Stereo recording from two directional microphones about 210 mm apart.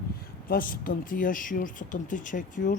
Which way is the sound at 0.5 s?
40° left (ahead or behind).